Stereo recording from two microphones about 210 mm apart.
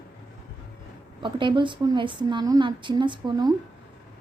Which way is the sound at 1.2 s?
20° right (ahead or behind).